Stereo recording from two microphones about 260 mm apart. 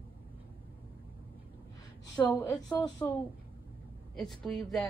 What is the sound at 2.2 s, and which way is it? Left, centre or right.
Speech, centre.